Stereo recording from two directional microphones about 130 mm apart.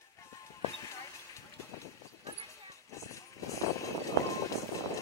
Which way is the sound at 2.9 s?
25° left (ahead or behind).